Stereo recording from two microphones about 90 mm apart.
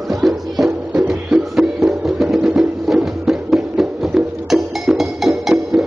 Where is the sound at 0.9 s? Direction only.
15° right (ahead or behind).